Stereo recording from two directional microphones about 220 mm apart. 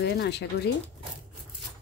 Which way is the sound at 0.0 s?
50° left (ahead or behind).